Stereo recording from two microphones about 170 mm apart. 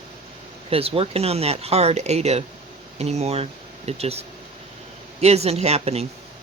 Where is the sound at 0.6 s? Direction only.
35° right (ahead or behind).